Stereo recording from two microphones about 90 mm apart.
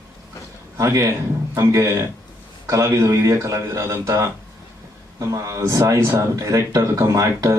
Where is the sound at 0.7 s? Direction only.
35° right (ahead or behind).